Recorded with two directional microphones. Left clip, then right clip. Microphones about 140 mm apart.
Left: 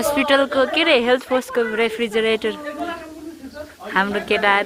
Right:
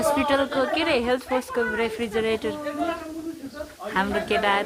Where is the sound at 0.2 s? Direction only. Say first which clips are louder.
Left 6 dB; 15° left (ahead or behind).